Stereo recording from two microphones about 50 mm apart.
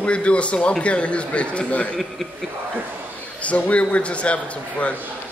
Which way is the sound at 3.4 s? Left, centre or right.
Left.